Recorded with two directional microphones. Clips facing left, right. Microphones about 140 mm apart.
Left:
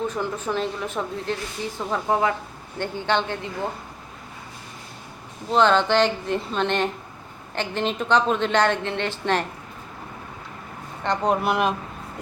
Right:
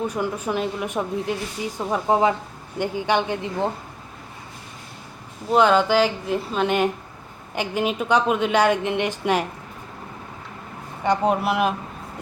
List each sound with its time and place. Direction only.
0.1 s a woman's voice: 10° right (ahead or behind)
5.5 s a woman's voice: 10° right (ahead or behind)
11.0 s speech: 10° right (ahead or behind)